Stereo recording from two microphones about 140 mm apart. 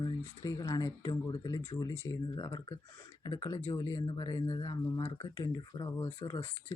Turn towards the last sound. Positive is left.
turn(degrees=25)  # may be behind; listen again after turning